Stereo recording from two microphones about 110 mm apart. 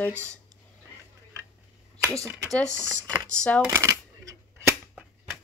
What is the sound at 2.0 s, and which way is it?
Speech, 25° right (ahead or behind).